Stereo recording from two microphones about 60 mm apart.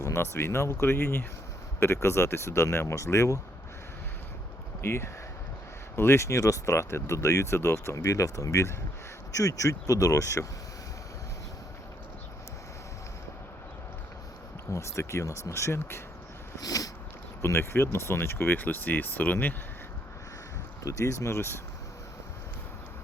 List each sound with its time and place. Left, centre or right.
0.0 s speech: left
4.8 s speech: left
14.7 s speech: left
16.6 s a sound: left
17.4 s speech: left
20.8 s speech: left